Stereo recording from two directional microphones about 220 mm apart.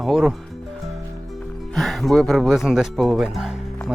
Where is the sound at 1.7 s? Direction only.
Centre (ahead or behind).